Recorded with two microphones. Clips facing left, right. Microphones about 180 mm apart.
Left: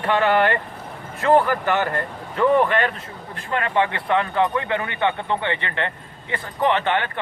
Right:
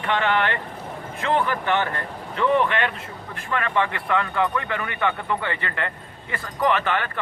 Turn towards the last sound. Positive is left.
turn(degrees=25)  # may be behind; listen again after turning